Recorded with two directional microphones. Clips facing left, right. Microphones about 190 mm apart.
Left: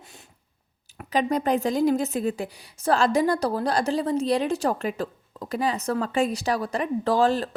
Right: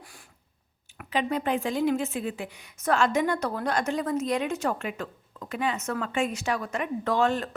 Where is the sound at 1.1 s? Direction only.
40° left (ahead or behind).